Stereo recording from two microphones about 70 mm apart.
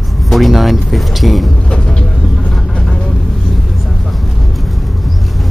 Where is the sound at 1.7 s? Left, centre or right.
Centre.